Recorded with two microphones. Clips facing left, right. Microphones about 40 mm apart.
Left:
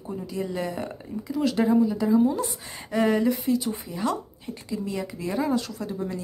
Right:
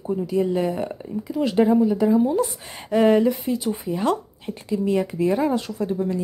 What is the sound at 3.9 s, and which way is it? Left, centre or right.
A woman's voice, right.